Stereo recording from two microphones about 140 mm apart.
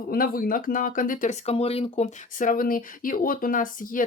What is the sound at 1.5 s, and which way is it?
Speech, 45° left (ahead or behind).